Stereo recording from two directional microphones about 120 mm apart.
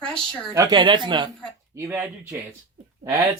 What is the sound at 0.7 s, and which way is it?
Speech, 40° right (ahead or behind).